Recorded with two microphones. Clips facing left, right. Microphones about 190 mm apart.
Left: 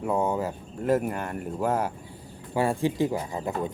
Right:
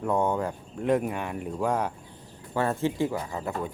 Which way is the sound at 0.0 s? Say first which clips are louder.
Even; 5° left (ahead or behind).